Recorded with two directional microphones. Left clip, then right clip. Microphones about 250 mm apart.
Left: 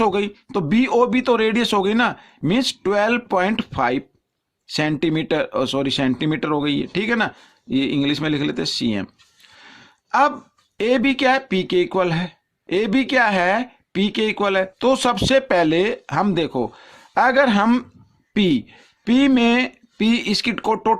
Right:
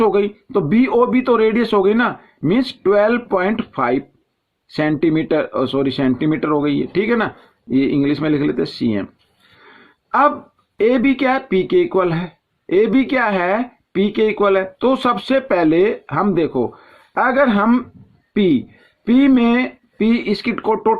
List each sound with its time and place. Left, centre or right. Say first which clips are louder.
0.0 s speech: right 4 dB; left
9.6 s a sound: right 4 dB; left
10.8 s speech: right 3 dB; left